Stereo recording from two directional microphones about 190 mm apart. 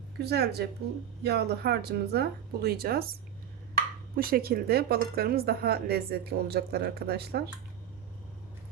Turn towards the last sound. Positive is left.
turn(degrees=-55)  # may be behind; listen again after turning